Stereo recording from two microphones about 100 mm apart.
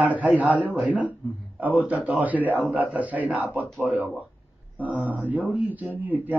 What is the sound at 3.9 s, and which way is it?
Speech, 15° right (ahead or behind).